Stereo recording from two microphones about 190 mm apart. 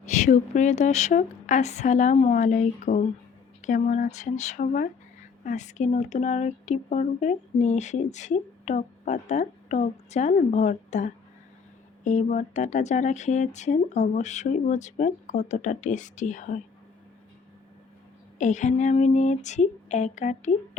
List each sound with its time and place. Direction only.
0.0 s speech: 40° left (ahead or behind)
18.3 s speech: 40° left (ahead or behind)